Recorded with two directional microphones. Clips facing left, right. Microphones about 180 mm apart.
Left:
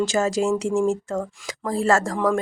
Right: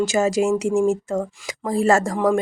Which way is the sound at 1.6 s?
15° right (ahead or behind).